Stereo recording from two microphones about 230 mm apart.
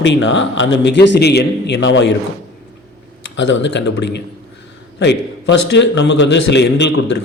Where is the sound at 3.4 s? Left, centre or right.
Left.